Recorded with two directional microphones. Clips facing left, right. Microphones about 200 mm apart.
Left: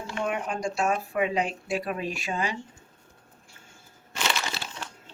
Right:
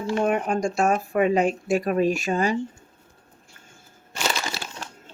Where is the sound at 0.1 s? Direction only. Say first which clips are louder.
Right 8 dB; 45° right (ahead or behind).